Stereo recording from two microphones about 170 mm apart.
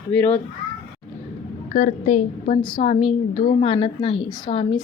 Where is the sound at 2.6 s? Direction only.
30° left (ahead or behind).